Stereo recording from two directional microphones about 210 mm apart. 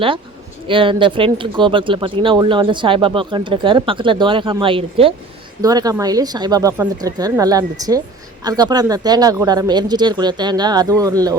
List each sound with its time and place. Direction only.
0.7 s speech: 25° right (ahead or behind)